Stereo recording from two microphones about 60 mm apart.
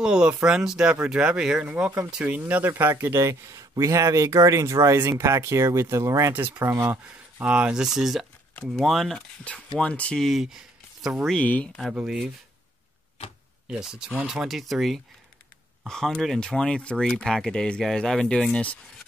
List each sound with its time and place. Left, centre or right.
0.0 s speech: centre
2.4 s speech: right
6.3 s speech: right
7.4 s speech: right
7.7 s speech: centre
9.4 s speech: centre
10.1 s speech: centre
10.4 s a sound: centre
11.3 s speech: left
11.9 s speech: centre
13.7 s speech: centre
14.6 s speech: centre